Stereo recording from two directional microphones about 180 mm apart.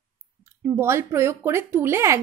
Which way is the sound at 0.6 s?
15° right (ahead or behind).